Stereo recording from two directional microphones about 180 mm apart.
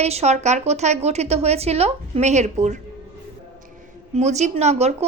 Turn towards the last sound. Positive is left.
turn(degrees=-35)  # may be behind; listen again after turning